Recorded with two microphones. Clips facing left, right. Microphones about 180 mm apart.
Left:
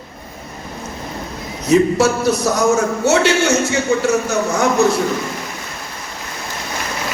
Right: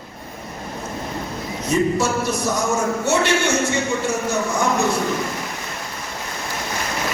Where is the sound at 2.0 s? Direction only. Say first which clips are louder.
Left 6 dB; 75° left (ahead or behind).